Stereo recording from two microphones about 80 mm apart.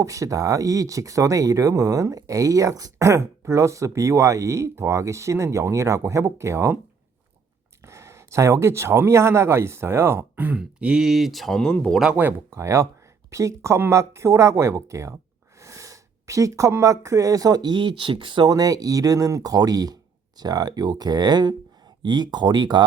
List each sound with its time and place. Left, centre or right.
0.0 s speech: right
7.9 s speech: right
10.6 s speech: centre
12.5 s speech: right
18.4 s speech: right